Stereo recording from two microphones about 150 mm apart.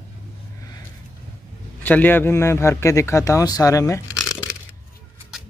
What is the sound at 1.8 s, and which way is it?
Speech, 10° left (ahead or behind).